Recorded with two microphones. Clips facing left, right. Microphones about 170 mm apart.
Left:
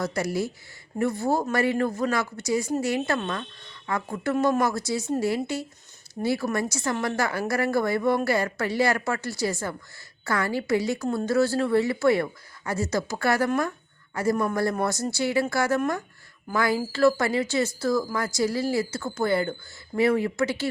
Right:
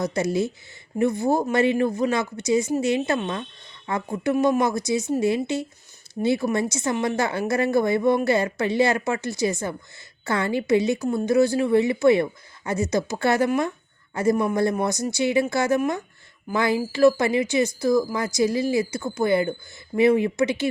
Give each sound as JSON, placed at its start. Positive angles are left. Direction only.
{"t": 0.0, "sound": "a woman's voice", "side_deg": -20}